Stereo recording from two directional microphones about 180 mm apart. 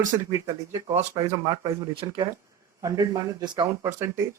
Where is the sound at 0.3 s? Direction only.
20° right (ahead or behind).